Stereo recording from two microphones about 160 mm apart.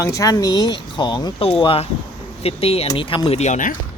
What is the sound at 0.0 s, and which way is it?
Speech, 20° left (ahead or behind).